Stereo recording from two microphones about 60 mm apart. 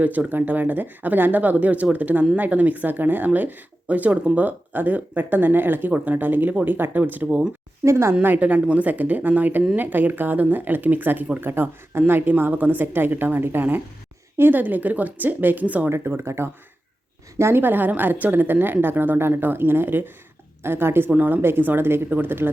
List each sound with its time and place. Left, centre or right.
0.0 s a woman's voice: right
7.9 s speech: right
8.2 s a woman's voice: right
15.9 s a woman's voice: right